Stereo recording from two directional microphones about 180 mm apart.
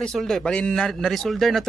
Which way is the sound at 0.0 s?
5° left (ahead or behind).